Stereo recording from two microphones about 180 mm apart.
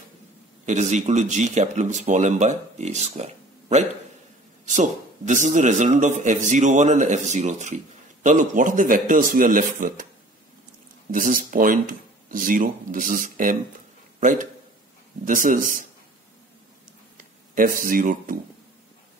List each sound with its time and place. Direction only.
0.7 s a man's voice: 40° right (ahead or behind)
11.1 s a man's voice: 50° right (ahead or behind)
15.2 s a man's voice: 50° right (ahead or behind)
17.6 s a man's voice: 50° right (ahead or behind)